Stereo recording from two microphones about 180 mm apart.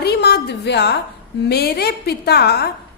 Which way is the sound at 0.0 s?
65° left (ahead or behind).